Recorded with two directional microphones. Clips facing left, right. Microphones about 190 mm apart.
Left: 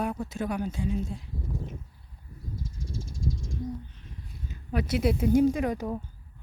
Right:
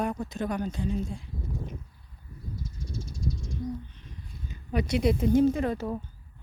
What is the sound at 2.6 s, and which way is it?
Snake, 90° left.